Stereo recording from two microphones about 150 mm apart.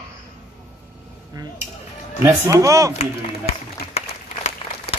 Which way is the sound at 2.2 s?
20° right (ahead or behind).